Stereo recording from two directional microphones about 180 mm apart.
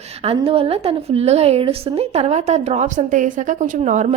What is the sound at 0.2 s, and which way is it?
A woman's voice, 30° right (ahead or behind).